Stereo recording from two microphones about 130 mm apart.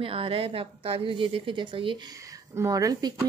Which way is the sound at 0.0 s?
45° right (ahead or behind).